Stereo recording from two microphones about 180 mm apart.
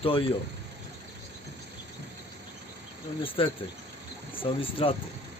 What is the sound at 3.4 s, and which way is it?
A man's voice, 30° left (ahead or behind).